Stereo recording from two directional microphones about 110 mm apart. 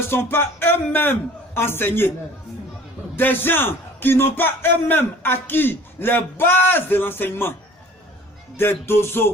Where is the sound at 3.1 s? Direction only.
20° left (ahead or behind).